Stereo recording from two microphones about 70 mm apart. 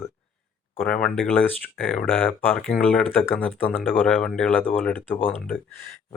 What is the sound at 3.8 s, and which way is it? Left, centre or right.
Speech, left.